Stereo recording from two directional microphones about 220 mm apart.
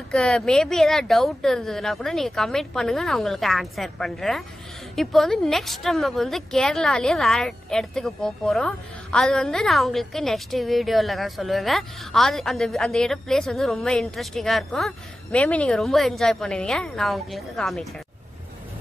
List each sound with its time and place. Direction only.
0.1 s a woman's voice: 5° left (ahead or behind)